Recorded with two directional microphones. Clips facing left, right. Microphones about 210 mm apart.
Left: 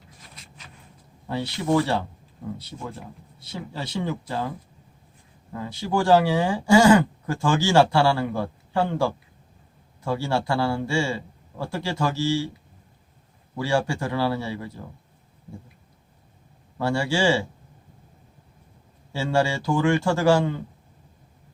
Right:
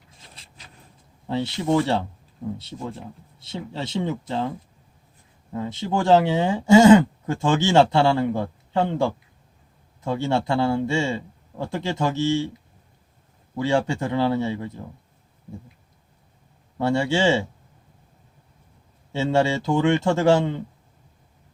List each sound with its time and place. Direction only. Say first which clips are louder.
0.2 s a sound: even; 30° right (ahead or behind)
1.3 s speech: right 1 dB; 25° right (ahead or behind)
5.5 s speech: even; 25° right (ahead or behind)
13.6 s speech: right 2 dB; 20° right (ahead or behind)
16.7 s speech: right 2 dB; 20° right (ahead or behind)
19.1 s speech: right 2 dB; 20° right (ahead or behind)